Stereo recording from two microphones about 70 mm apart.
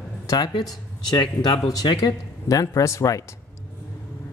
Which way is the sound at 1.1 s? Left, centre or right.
Left.